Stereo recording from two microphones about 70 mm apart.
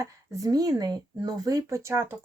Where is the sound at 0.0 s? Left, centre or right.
Right.